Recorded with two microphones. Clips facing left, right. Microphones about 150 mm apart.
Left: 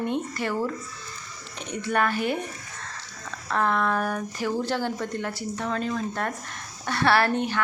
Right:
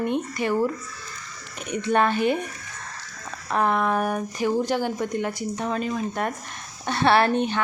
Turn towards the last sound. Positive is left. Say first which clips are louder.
# right 3 dB
turn(degrees=-20)  # may be behind; listen again after turning